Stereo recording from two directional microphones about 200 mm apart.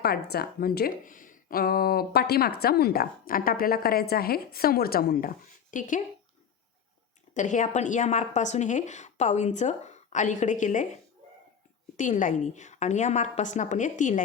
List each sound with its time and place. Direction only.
0.0 s a woman's voice: 50° left (ahead or behind)
7.3 s a woman's voice: 40° left (ahead or behind)
11.9 s a woman's voice: 40° left (ahead or behind)